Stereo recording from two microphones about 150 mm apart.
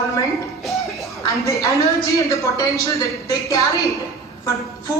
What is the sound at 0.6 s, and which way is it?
Music, centre (ahead or behind).